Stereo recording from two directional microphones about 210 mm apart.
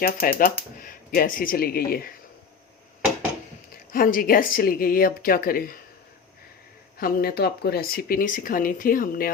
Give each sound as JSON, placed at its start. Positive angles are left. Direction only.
{"t": 0.0, "sound": "speech", "side_deg": 40}
{"t": 3.9, "sound": "speech", "side_deg": 40}
{"t": 7.0, "sound": "speech", "side_deg": 45}